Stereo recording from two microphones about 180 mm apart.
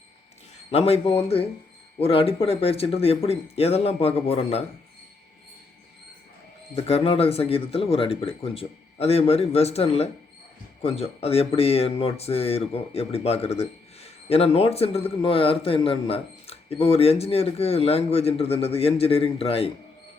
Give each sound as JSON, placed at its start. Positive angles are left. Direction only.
{"t": 0.7, "sound": "speech", "side_deg": 35}
{"t": 6.7, "sound": "speech", "side_deg": 35}